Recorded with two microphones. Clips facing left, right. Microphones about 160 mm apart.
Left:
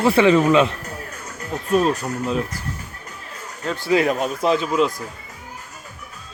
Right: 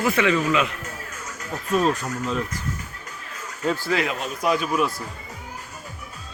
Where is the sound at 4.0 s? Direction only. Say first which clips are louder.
Left 6 dB; 45° left (ahead or behind).